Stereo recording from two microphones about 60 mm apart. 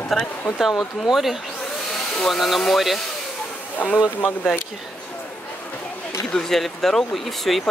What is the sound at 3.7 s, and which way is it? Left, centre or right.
Speech, left.